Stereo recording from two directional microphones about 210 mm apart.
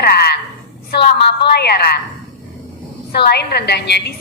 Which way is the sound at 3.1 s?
50° left (ahead or behind).